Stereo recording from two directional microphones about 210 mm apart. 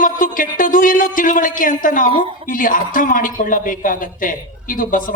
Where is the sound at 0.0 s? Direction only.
40° left (ahead or behind).